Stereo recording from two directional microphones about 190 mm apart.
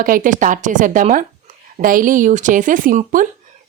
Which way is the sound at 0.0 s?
45° right (ahead or behind).